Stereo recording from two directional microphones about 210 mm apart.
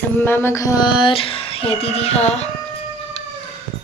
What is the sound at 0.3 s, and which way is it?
Music, 10° left (ahead or behind).